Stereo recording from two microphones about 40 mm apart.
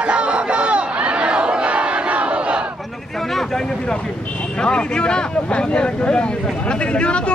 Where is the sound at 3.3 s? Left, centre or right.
Centre.